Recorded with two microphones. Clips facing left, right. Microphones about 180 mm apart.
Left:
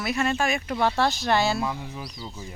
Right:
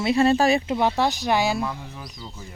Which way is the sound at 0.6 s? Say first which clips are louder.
Right 2 dB; 20° right (ahead or behind).